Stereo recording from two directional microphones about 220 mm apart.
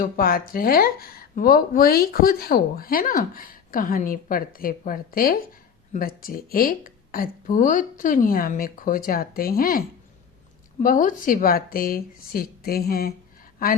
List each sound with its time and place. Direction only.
0.0 s speech: 40° left (ahead or behind)